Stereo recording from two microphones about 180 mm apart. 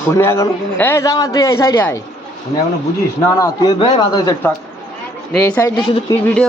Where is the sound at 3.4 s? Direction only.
25° left (ahead or behind).